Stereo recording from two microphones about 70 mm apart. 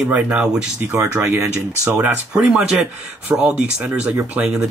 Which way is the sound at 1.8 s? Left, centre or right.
Right.